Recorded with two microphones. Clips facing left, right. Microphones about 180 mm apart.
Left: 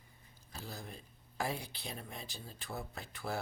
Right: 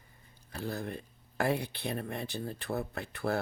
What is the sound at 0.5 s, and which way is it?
Speech, 60° right (ahead or behind).